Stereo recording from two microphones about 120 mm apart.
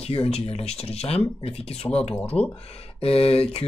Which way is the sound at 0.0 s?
55° left (ahead or behind).